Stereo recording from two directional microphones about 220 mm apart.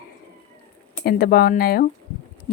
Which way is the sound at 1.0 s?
45° left (ahead or behind).